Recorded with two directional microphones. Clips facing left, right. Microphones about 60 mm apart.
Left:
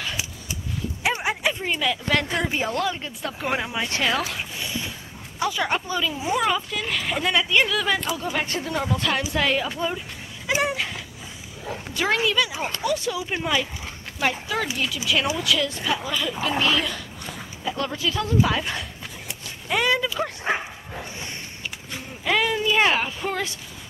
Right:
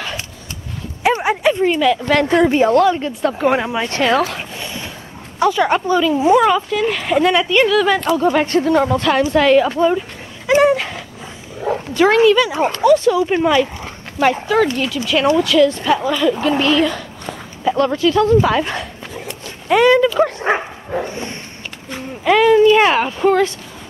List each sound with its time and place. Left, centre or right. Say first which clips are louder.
1.0 s a sound: right 9 dB; right
1.9 s speech: right 9 dB; right
3.5 s speech: right 8 dB; right
4.6 s a sound: right 3 dB; right
5.4 s speech: right 10 dB; right
6.8 s speech: right 10 dB; right
7.7 s speech: right 10 dB; right
9.8 s a sound: right 12 dB; right
11.6 s speech: right 12 dB; right
20.2 s dog: right 10 dB; right
21.9 s speech: right 9 dB; right